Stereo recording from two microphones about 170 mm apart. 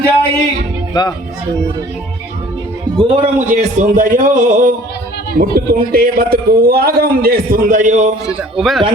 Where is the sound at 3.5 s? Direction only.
50° right (ahead or behind).